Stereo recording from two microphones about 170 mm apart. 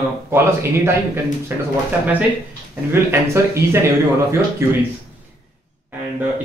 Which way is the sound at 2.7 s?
15° right (ahead or behind).